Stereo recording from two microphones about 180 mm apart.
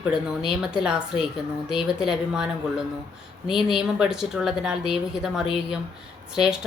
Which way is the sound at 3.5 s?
Centre (ahead or behind).